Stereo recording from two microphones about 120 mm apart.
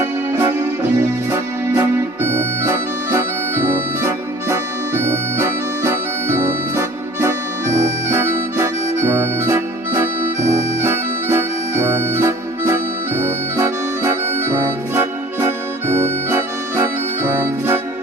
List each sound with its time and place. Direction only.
2.2 s music: 20° right (ahead or behind)
8.1 s harmonica: 20° right (ahead or behind)
10.8 s accordion: 20° right (ahead or behind)
16.3 s organ: 20° right (ahead or behind)